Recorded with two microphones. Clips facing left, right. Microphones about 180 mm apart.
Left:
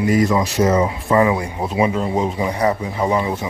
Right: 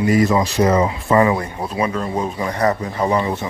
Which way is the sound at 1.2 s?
10° left (ahead or behind).